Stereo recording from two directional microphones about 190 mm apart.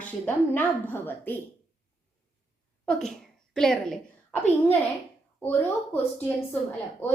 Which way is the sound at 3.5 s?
5° left (ahead or behind).